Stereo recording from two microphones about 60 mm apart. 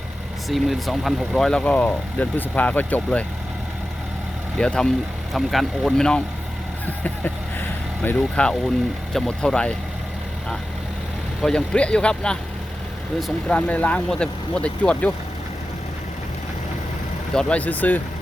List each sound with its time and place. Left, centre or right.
0.4 s speech: centre
1.5 s speech: left
4.5 s speech: centre
5.3 s speech: centre
6.8 s vehicle: left
8.0 s speech: left
8.4 s speech: centre
11.4 s speech: centre
13.5 s speech: left
17.3 s speech: left